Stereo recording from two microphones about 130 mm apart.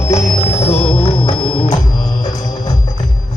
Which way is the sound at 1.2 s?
40° left (ahead or behind).